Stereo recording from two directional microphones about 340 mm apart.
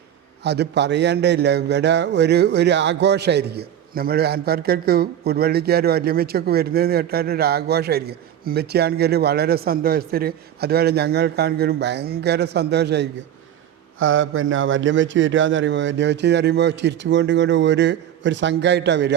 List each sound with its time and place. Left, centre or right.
0.4 s a man's voice: right